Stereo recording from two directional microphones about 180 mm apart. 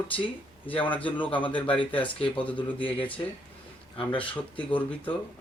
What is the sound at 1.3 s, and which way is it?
Speech, 30° left (ahead or behind).